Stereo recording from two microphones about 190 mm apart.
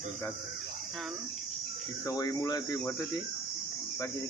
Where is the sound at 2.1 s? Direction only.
20° left (ahead or behind).